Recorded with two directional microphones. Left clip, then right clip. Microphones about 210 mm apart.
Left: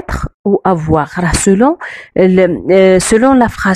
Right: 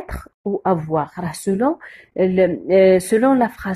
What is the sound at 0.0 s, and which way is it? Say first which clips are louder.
Speech: left 10 dB; 40° left (ahead or behind).